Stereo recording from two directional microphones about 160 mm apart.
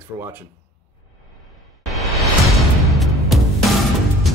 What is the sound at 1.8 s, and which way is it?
Music, centre (ahead or behind).